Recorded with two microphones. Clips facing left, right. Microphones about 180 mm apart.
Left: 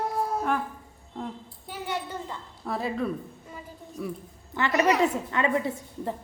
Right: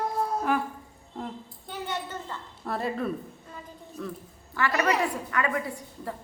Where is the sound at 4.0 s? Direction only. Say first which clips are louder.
Left 2 dB; 15° left (ahead or behind).